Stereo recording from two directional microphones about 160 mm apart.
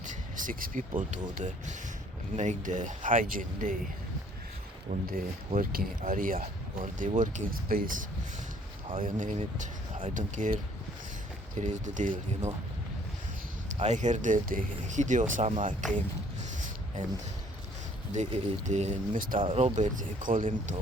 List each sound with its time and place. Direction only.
0.0 s speech: 55° right (ahead or behind)
4.9 s speech: 65° right (ahead or behind)
11.5 s speech: 50° right (ahead or behind)
13.7 s speech: 50° right (ahead or behind)
16.6 s a sound: 50° right (ahead or behind)
18.1 s speech: 50° right (ahead or behind)
19.4 s speech: 35° right (ahead or behind); by 20.7 s 55° right (ahead or behind)